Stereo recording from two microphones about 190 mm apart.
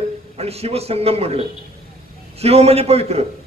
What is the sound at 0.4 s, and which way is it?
A man's voice, 30° right (ahead or behind).